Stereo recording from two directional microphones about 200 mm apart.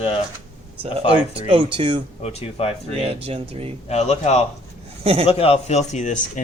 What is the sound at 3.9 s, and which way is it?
Speech, 35° left (ahead or behind).